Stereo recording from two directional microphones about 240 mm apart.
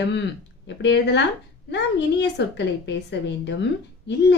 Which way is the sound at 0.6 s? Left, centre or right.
Left.